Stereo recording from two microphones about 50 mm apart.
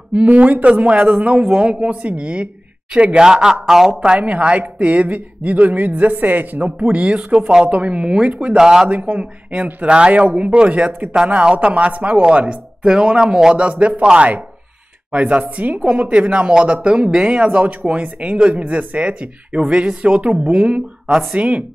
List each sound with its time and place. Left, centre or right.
0.1 s speech: right
3.3 s speech: centre
4.0 s speech: right
8.5 s speech: centre
8.8 s speech: right